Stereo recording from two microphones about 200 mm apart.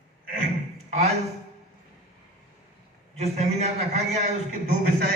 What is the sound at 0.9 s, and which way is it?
Speech, 30° right (ahead or behind).